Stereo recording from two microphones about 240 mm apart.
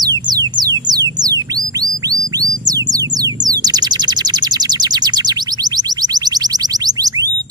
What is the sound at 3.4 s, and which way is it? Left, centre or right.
Bird, centre.